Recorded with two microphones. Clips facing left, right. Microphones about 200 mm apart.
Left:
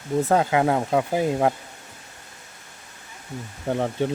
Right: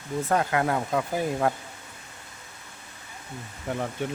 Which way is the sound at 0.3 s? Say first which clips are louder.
Left 3 dB; 20° left (ahead or behind).